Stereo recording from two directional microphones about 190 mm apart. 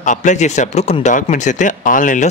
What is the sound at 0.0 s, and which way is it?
Speech, 40° left (ahead or behind).